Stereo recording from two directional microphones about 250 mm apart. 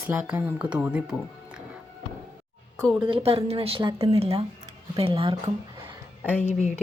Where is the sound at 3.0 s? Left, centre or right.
Right.